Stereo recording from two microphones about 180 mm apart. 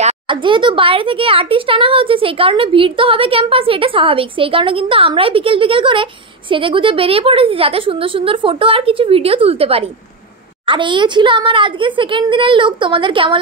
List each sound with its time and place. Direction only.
0.0 s a child's voice: 25° right (ahead or behind)